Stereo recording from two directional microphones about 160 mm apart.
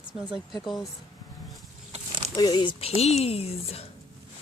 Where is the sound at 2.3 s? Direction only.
25° left (ahead or behind).